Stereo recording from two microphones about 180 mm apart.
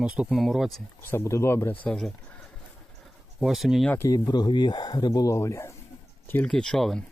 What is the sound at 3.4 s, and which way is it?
Speech, centre (ahead or behind).